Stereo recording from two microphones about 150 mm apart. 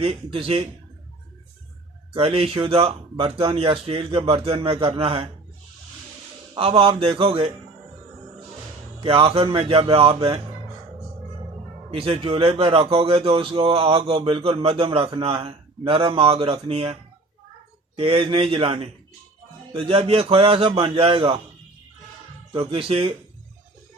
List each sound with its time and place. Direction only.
0.0 s a man's voice: 40° right (ahead or behind)
2.1 s a man's voice: 40° right (ahead or behind)
6.5 s a man's voice: 40° right (ahead or behind)
9.0 s a man's voice: 40° right (ahead or behind)
11.9 s a man's voice: 40° right (ahead or behind)
22.5 s a man's voice: 35° right (ahead or behind)